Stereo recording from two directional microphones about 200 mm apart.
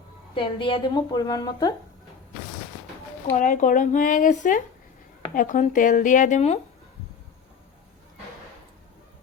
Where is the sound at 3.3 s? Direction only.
40° left (ahead or behind).